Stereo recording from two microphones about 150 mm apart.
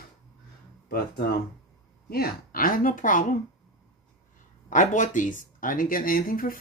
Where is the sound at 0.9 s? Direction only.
90° left; by 3.2 s 65° left (ahead or behind).